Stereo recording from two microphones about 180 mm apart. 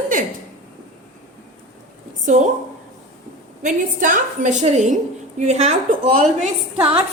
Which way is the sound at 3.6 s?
45° right (ahead or behind).